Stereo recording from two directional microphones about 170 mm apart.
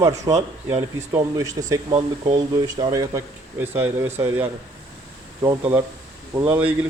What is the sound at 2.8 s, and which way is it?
Speech, 20° right (ahead or behind).